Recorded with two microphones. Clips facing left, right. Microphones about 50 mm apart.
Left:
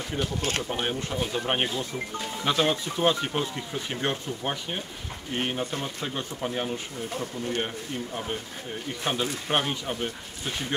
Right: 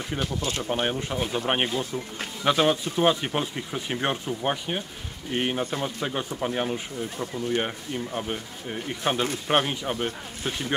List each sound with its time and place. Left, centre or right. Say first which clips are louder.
0.4 s speech: left 1 dB; left
0.7 s speech: right 3 dB; centre